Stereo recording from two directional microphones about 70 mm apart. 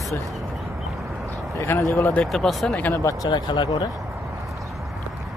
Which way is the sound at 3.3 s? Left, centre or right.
Left.